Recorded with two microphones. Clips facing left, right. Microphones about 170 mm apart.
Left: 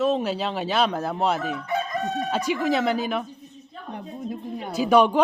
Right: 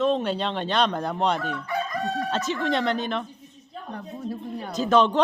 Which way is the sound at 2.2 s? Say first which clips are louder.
Left 2 dB; 10° left (ahead or behind).